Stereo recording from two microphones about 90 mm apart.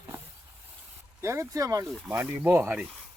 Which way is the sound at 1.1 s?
30° right (ahead or behind).